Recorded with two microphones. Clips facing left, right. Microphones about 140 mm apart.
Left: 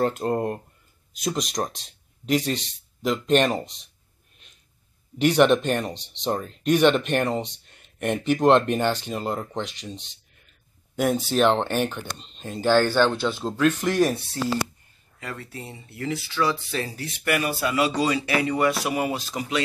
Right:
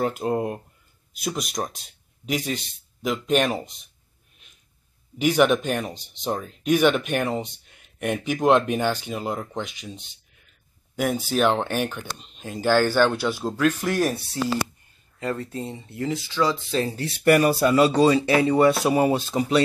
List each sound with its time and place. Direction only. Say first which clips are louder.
0.0 s speech: left 1 dB; 5° right (ahead or behind)
5.2 s speech: left 1 dB; 5° right (ahead or behind)
15.1 s speech: right 8 dB; 25° right (ahead or behind)
16.8 s speech: right 8 dB; 30° right (ahead or behind)